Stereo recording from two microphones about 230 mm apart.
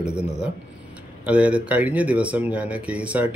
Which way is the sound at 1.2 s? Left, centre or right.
Centre.